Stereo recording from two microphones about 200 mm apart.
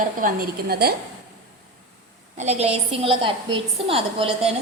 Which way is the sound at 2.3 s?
35° right (ahead or behind).